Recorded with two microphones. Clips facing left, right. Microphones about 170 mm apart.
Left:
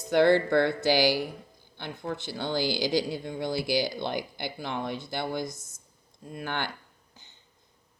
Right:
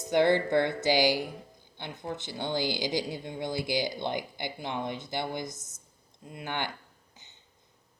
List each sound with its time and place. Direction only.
0.0 s speech: 20° right (ahead or behind)